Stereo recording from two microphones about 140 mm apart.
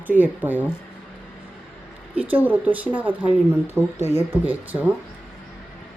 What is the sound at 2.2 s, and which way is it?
Speech, 10° right (ahead or behind).